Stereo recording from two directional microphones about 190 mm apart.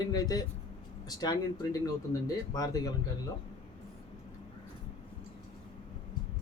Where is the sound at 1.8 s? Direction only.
20° left (ahead or behind).